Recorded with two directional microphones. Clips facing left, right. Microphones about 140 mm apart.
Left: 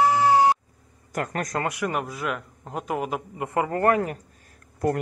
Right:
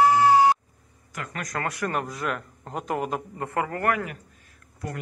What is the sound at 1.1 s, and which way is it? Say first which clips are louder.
Speech: left 7 dB; 45° left (ahead or behind).